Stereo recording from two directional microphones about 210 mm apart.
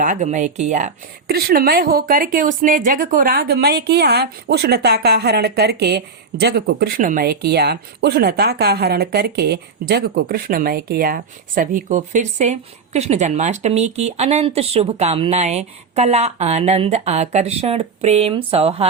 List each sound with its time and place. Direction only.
0.0 s speech: 35° right (ahead or behind)